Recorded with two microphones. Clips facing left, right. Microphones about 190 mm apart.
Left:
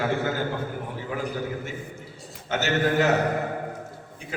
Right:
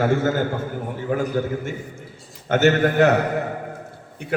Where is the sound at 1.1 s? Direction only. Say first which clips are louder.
Right 8 dB; 50° right (ahead or behind).